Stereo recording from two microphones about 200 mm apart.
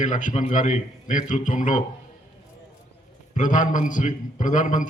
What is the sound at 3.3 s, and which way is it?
A man's voice, 40° left (ahead or behind).